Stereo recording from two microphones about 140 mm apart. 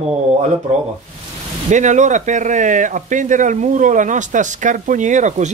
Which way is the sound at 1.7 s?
60° right (ahead or behind).